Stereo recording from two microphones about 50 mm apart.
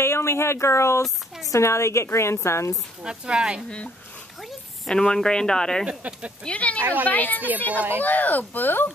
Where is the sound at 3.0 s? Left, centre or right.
Centre.